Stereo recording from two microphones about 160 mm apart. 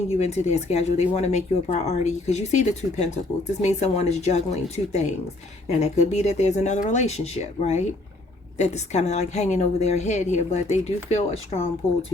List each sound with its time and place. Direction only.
0.2 s speech: 45° left (ahead or behind)